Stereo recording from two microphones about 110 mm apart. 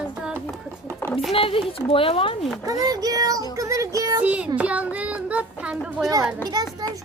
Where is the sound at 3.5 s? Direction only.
30° right (ahead or behind).